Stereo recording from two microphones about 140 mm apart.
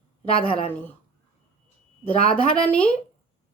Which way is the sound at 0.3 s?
40° left (ahead or behind).